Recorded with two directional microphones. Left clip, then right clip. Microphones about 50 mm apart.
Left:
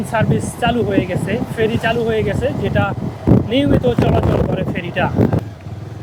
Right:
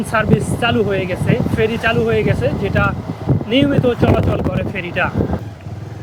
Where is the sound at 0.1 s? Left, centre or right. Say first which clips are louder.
Right 2 dB; right.